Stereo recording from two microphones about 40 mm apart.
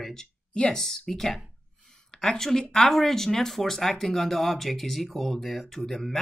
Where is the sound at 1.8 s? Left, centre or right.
Centre.